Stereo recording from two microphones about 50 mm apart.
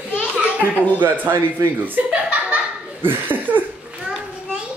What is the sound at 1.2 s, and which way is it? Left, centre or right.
Speech, right.